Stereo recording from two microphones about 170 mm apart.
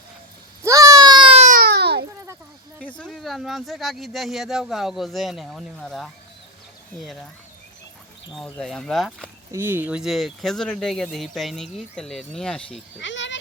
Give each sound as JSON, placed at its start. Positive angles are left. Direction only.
{"t": 0.6, "sound": "a sound", "side_deg": -20}
{"t": 1.5, "sound": "baby cry", "side_deg": -60}
{"t": 3.0, "sound": "speech", "side_deg": 0}
{"t": 8.4, "sound": "speech", "side_deg": 5}
{"t": 9.5, "sound": "speech", "side_deg": -15}
{"t": 13.0, "sound": "speech", "side_deg": 90}